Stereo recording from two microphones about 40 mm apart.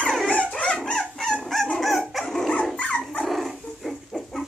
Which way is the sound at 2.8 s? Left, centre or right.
Left.